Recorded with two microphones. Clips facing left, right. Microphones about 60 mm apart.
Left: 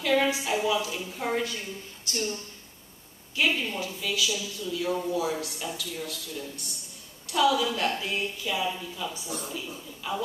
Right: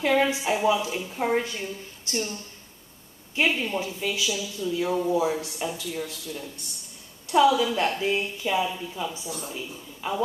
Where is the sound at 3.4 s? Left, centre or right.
Right.